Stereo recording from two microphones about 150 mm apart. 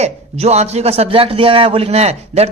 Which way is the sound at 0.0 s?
45° right (ahead or behind).